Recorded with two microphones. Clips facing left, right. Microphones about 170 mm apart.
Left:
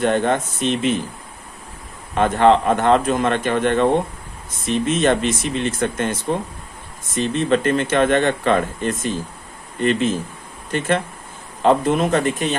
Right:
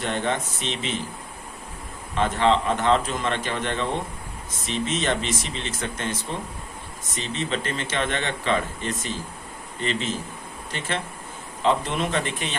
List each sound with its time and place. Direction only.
0.0 s speech: 50° left (ahead or behind)
2.1 s speech: 55° left (ahead or behind)
7.2 s speech: 55° left (ahead or behind)